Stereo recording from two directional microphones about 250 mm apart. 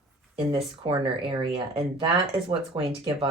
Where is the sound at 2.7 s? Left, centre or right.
Right.